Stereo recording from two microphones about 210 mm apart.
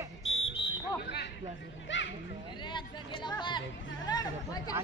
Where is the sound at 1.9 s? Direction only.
60° left (ahead or behind).